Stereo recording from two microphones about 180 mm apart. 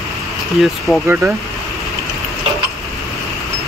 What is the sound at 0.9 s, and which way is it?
Speech, centre (ahead or behind).